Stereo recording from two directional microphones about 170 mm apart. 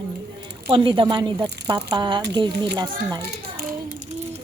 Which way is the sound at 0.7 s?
30° right (ahead or behind).